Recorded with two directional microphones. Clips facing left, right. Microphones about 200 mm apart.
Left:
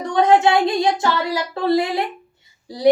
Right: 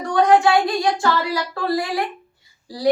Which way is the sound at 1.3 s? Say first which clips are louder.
Left 3 dB; 25° left (ahead or behind).